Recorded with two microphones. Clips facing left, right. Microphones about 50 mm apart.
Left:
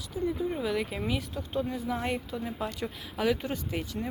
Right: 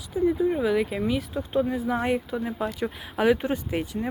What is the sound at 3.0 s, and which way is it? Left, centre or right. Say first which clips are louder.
Speech: right 7 dB; right.